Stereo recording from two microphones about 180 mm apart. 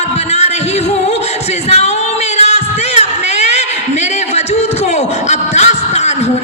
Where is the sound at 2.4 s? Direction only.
35° left (ahead or behind).